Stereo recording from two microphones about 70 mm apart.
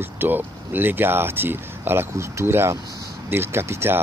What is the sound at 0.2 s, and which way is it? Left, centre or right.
Speech, right.